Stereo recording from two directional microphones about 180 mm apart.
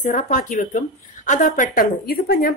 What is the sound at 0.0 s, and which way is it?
A woman's voice, 45° left (ahead or behind).